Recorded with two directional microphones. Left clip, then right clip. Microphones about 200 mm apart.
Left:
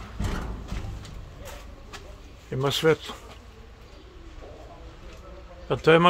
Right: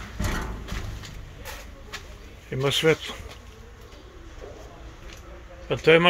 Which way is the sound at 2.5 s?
5° left (ahead or behind).